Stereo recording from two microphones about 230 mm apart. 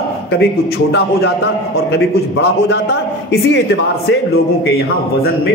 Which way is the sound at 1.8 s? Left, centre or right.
Left.